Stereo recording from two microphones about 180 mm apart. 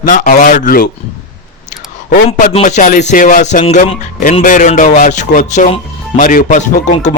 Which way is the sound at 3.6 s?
35° left (ahead or behind).